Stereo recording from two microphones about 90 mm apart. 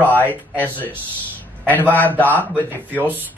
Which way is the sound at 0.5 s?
20° left (ahead or behind).